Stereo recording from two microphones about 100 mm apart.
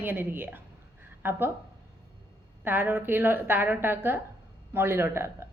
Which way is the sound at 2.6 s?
20° right (ahead or behind).